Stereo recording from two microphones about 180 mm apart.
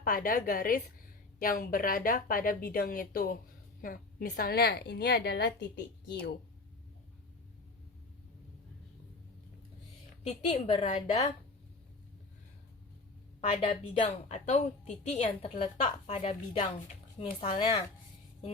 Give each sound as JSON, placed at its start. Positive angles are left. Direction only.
{"t": 0.0, "sound": "a woman's voice", "side_deg": 55}
{"t": 10.2, "sound": "a woman's voice", "side_deg": 35}
{"t": 13.5, "sound": "a woman's voice", "side_deg": 30}
{"t": 17.2, "sound": "a woman's voice", "side_deg": 30}